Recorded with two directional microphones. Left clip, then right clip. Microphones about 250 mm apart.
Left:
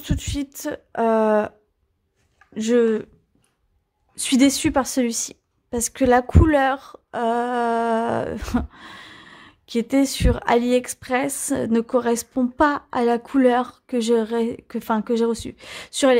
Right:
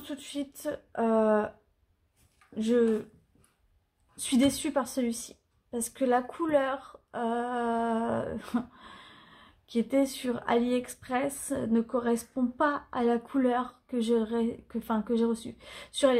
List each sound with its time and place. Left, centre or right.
0.0 s a woman's voice: left
2.5 s a woman's voice: left
4.1 s a woman's voice: left